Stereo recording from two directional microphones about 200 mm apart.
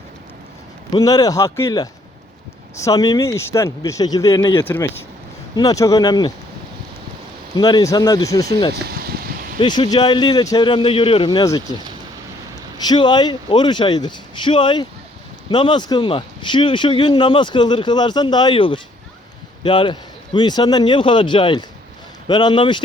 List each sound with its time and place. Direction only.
0.9 s speech: 20° left (ahead or behind)
7.5 s speech: 20° left (ahead or behind)
8.7 s a sound: 50° right (ahead or behind)
9.6 s speech: 20° left (ahead or behind)
11.3 s speech: 15° left (ahead or behind)